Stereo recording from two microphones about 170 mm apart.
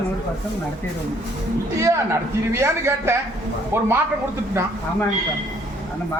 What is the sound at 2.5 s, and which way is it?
A man's voice, 15° right (ahead or behind).